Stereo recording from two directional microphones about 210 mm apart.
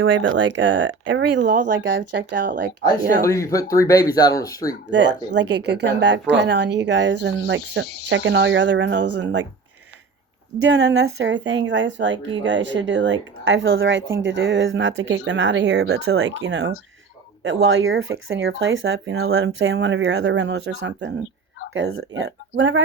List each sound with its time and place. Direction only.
0.0 s speech: 65° right (ahead or behind)
2.8 s speech: 15° left (ahead or behind)
4.9 s speech: 55° right (ahead or behind)
10.7 s speech: 55° right (ahead or behind)
16.0 s speech: 70° right (ahead or behind)
17.4 s speech: 70° right (ahead or behind)